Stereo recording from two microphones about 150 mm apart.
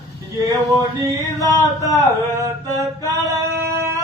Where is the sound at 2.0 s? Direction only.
20° right (ahead or behind).